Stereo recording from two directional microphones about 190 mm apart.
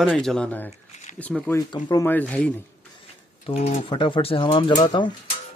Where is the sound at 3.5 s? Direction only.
35° left (ahead or behind).